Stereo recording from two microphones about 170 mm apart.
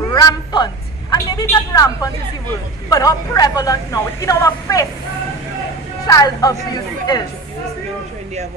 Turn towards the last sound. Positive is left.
turn(degrees=20)  # may be behind; listen again after turning